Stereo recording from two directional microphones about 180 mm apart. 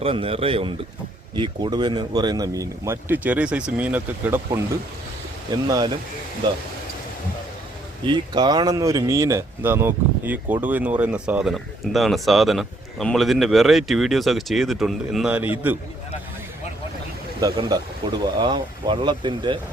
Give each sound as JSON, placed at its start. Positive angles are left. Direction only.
{"t": 0.0, "sound": "speech", "side_deg": -30}
{"t": 5.6, "sound": "speech", "side_deg": -20}
{"t": 8.0, "sound": "speech", "side_deg": -25}
{"t": 17.4, "sound": "speech", "side_deg": -20}